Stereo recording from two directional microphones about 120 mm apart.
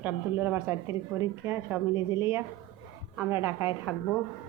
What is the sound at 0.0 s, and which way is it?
A woman's voice, 15° right (ahead or behind).